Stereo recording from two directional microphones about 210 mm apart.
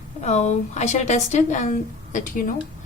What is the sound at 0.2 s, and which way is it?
A woman's voice, 35° left (ahead or behind).